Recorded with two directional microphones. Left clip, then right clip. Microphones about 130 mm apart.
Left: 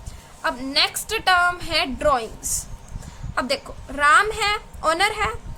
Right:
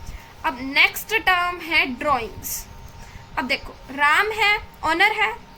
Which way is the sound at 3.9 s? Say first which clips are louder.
Left 2 dB; 45° left (ahead or behind).